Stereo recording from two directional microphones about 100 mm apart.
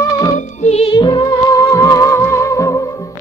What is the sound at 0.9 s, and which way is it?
Music, 45° left (ahead or behind).